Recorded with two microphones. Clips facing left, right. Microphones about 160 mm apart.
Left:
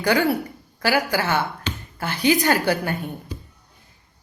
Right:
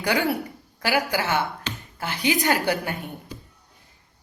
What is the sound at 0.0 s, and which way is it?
A woman's voice, 20° right (ahead or behind).